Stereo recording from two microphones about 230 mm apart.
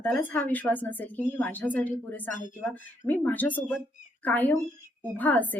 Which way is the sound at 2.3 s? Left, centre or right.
Left.